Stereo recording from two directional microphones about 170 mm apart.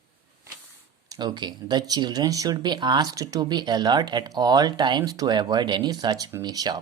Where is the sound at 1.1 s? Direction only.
25° right (ahead or behind).